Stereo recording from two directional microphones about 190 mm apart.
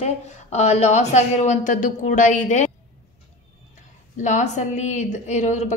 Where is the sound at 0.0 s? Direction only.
35° left (ahead or behind).